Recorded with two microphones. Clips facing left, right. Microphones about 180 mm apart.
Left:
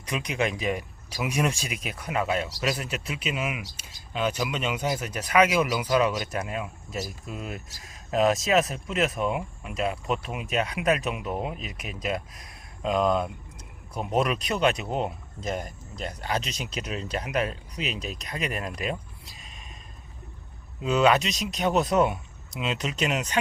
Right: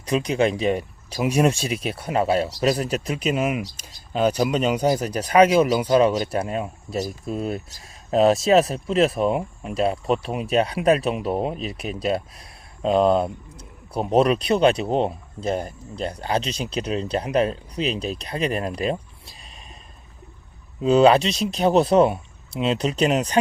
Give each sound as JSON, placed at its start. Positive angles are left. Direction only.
{"t": 0.0, "sound": "speech", "side_deg": -35}
{"t": 20.8, "sound": "speech", "side_deg": -30}